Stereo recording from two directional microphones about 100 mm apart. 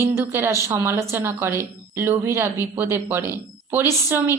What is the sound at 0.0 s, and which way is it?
A woman's voice, 25° right (ahead or behind).